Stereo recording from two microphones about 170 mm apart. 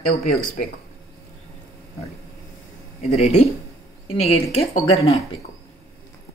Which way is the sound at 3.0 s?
40° left (ahead or behind).